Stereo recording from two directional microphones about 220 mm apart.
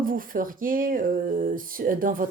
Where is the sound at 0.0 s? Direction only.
40° right (ahead or behind).